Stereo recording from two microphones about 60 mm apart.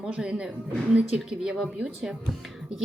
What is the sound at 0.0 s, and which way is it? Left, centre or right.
A woman's voice, centre.